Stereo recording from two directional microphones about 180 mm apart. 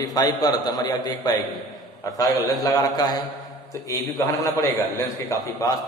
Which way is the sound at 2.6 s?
20° left (ahead or behind).